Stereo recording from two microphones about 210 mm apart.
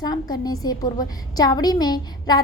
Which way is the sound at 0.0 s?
20° left (ahead or behind).